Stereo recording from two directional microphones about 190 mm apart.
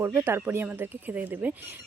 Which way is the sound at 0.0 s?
10° right (ahead or behind).